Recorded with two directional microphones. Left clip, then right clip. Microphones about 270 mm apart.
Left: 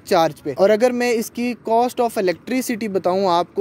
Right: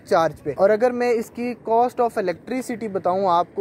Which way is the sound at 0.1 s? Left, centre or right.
Left.